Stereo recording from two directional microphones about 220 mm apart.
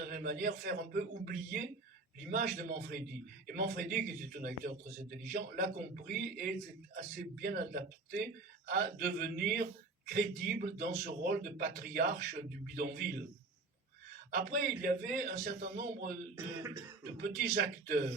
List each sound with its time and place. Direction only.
0.0 s a man's voice: 40° right (ahead or behind)
14.3 s a man's voice: 40° right (ahead or behind)
17.2 s a man's voice: 40° right (ahead or behind)